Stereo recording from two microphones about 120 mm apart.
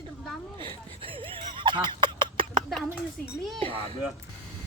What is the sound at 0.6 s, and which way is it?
Speech, 45° right (ahead or behind).